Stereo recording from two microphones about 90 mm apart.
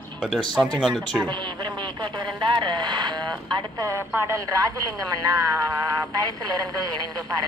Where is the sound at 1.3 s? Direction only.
60° right (ahead or behind).